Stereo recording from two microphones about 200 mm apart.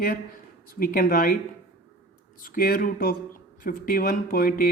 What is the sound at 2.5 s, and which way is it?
Speech, 45° left (ahead or behind).